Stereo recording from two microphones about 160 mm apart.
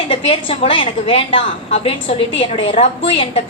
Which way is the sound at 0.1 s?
35° left (ahead or behind).